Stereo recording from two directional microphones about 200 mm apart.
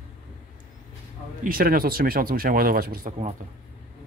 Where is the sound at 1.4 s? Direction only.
45° right (ahead or behind).